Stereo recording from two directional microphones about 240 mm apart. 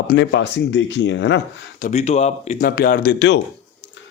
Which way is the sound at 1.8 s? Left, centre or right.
Left.